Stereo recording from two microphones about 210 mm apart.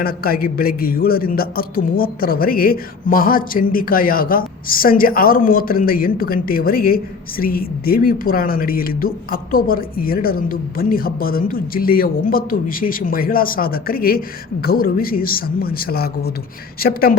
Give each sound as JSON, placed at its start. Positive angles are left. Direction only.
{"t": 0.0, "sound": "a man's voice", "side_deg": 45}